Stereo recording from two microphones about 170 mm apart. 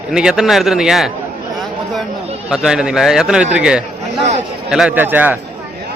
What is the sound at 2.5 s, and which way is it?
Speech, 5° right (ahead or behind).